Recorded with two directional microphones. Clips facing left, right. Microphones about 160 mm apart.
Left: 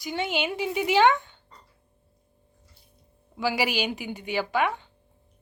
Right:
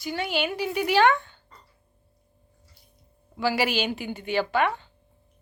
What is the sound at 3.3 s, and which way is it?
Speech, 10° left (ahead or behind).